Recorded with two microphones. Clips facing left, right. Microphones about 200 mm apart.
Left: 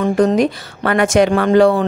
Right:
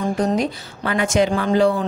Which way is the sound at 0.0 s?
70° left (ahead or behind).